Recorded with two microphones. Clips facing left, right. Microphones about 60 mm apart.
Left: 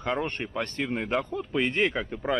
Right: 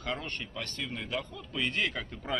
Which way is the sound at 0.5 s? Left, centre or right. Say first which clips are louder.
Left 10 dB; left.